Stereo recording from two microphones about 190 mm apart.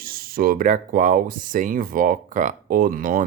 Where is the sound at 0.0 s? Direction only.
50° right (ahead or behind).